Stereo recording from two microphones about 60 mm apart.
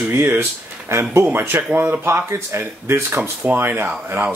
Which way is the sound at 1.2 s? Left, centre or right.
Right.